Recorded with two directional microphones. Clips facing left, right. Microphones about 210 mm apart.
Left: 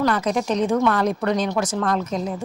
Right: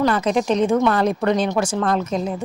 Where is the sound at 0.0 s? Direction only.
25° right (ahead or behind).